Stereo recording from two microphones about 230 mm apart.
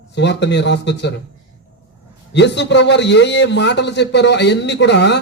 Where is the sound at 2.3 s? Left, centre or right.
Left.